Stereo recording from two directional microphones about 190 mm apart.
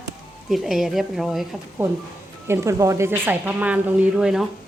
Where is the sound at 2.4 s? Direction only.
15° right (ahead or behind).